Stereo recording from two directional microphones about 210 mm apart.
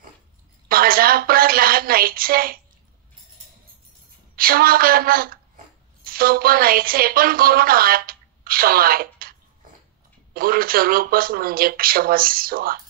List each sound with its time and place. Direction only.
0.7 s a sound: 45° right (ahead or behind)
4.4 s a woman's voice: 45° right (ahead or behind)
10.3 s speech: 45° right (ahead or behind)